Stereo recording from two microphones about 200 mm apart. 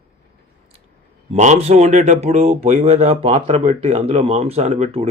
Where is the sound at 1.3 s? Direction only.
35° right (ahead or behind).